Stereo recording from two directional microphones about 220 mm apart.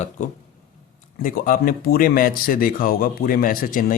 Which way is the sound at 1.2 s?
40° left (ahead or behind).